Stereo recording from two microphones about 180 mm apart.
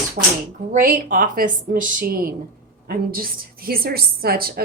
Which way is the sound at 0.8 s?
50° right (ahead or behind).